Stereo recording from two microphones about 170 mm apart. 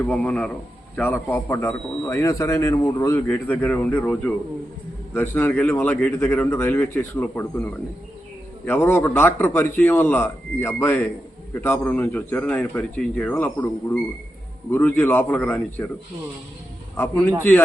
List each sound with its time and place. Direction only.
0.0 s a man's voice: 5° left (ahead or behind)